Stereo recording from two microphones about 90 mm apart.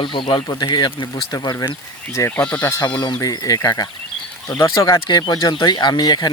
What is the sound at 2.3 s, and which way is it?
Speech, 15° left (ahead or behind).